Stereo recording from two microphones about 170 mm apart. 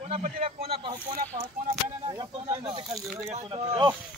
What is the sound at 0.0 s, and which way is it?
Speech, 40° right (ahead or behind).